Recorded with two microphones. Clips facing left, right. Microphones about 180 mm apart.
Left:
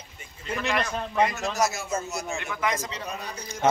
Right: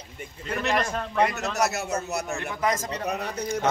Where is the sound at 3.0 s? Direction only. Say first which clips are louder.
Right 7 dB; 70° right (ahead or behind).